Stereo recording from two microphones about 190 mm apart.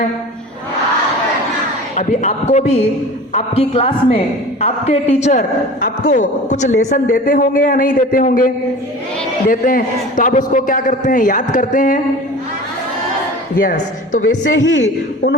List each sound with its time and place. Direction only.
2.0 s a woman's voice: 35° left (ahead or behind)
9.5 s a man's voice: 45° left (ahead or behind)
13.6 s a man's voice: 45° left (ahead or behind)
14.4 s a man's voice: 75° left (ahead or behind)